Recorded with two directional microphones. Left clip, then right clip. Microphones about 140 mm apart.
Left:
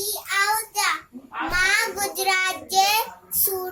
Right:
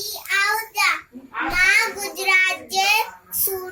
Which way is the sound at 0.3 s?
30° left (ahead or behind).